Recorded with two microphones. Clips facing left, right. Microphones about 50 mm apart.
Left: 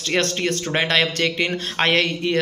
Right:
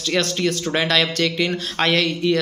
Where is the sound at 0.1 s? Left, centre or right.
Left.